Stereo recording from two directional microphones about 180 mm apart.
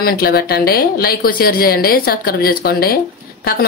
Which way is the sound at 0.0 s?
60° left (ahead or behind).